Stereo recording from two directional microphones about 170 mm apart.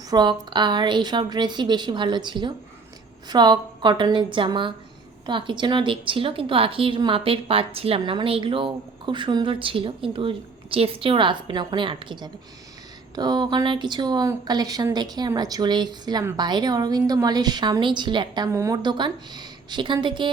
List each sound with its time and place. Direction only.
0.1 s a woman's voice: 25° right (ahead or behind)